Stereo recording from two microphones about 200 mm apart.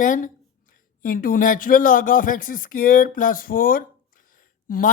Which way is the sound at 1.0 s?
45° left (ahead or behind).